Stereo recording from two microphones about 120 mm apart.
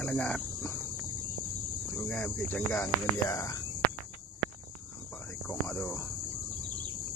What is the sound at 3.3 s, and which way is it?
Speech, 25° left (ahead or behind).